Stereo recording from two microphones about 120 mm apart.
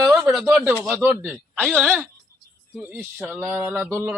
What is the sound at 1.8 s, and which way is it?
Music, centre (ahead or behind).